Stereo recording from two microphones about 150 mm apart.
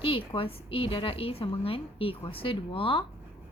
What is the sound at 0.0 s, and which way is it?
A woman's voice, 35° left (ahead or behind).